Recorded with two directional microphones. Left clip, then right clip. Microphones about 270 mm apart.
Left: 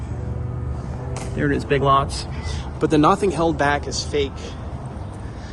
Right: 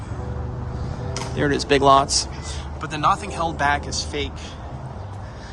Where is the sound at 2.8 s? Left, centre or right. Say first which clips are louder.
Left 5 dB; centre.